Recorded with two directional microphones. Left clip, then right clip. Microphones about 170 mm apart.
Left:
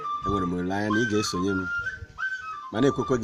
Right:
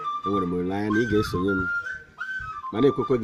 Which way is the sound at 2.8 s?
5° left (ahead or behind).